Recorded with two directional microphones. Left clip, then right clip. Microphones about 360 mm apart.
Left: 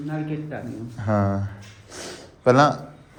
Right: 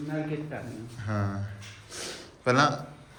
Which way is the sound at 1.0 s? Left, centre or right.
Centre.